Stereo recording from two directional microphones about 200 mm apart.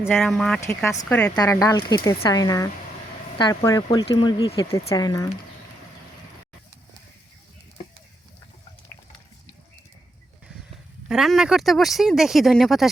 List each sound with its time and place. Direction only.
0.0 s speech: 5° left (ahead or behind)
11.1 s speech: centre (ahead or behind)